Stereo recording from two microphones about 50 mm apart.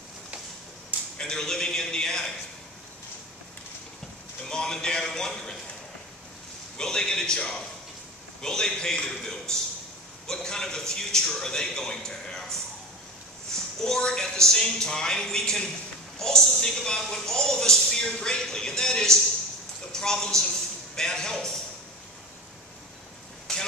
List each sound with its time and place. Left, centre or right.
1.1 s a sound: centre
4.5 s speech: centre
6.8 s a man's voice: centre
23.5 s vehicle: centre